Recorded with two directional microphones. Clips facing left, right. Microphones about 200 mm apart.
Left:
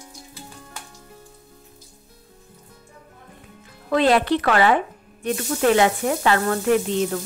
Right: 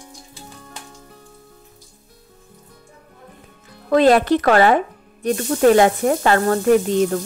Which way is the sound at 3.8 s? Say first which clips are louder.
Right 4 dB; 45° right (ahead or behind).